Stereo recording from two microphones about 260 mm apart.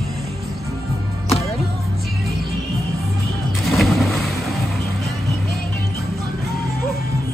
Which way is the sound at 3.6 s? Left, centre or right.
Centre.